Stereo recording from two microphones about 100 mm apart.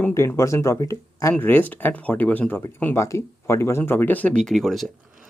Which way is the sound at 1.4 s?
20° left (ahead or behind).